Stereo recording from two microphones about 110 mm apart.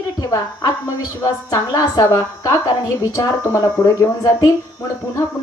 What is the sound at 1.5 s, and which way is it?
A woman's voice, 35° left (ahead or behind).